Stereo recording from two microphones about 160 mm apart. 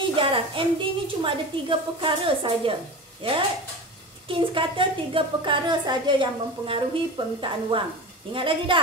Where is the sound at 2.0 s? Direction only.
35° right (ahead or behind).